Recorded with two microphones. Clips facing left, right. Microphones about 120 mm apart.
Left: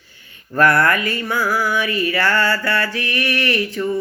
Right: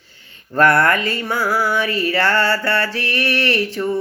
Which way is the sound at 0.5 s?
25° right (ahead or behind).